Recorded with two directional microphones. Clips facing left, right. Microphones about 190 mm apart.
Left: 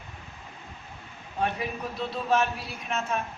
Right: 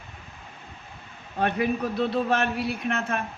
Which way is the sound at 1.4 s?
65° right (ahead or behind).